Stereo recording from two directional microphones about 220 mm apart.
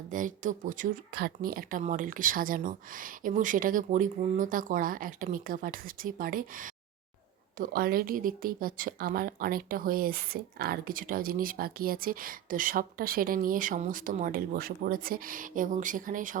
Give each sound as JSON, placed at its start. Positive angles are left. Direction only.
{"t": 0.1, "sound": "speech", "side_deg": -35}